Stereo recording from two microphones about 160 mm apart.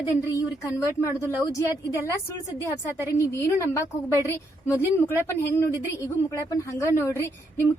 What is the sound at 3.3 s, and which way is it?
A woman's voice, 20° left (ahead or behind).